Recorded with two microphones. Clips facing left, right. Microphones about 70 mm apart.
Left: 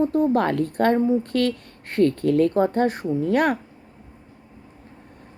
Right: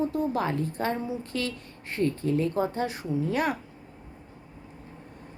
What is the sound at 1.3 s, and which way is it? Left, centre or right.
Speech, left.